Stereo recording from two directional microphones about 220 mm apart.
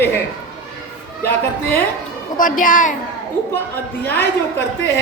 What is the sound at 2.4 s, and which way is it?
Speech, 35° left (ahead or behind).